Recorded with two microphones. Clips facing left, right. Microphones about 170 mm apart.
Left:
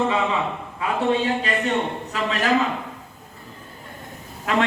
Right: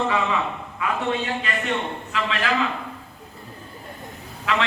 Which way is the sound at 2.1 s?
40° left (ahead or behind).